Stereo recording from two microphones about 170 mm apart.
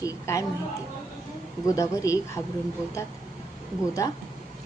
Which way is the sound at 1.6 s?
20° left (ahead or behind).